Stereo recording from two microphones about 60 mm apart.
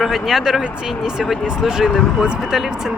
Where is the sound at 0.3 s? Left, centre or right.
Centre.